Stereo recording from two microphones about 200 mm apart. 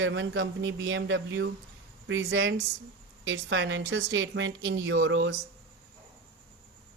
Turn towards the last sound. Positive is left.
turn(degrees=-70)  # may be behind; listen again after turning